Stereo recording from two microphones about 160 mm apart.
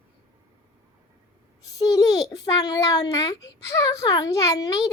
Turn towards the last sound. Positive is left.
turn(degrees=20)  # may be behind; listen again after turning